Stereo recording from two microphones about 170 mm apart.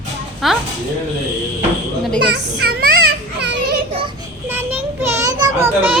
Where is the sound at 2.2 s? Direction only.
75° right (ahead or behind).